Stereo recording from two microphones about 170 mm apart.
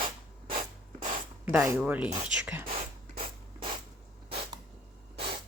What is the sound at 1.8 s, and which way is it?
Speech, 10° right (ahead or behind).